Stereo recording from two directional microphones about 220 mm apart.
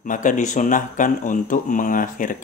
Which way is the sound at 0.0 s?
35° left (ahead or behind).